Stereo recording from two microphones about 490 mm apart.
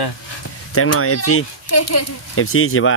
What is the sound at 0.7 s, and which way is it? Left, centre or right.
Speech, left.